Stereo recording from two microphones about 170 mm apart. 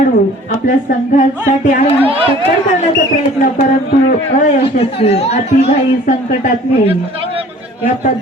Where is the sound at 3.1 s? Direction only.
45° left (ahead or behind).